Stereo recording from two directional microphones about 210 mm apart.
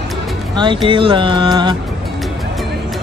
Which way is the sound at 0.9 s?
25° right (ahead or behind).